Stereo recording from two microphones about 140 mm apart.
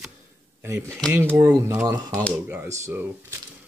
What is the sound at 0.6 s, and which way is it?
Speech, 20° right (ahead or behind).